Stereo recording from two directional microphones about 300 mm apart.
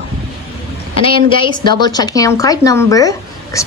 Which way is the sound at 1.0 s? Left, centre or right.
Centre.